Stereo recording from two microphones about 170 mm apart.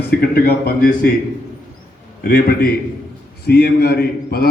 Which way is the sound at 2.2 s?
65° left (ahead or behind).